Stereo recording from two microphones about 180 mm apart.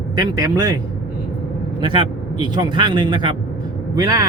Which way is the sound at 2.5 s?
25° right (ahead or behind).